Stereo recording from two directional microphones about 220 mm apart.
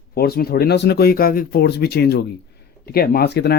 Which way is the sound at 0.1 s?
45° left (ahead or behind).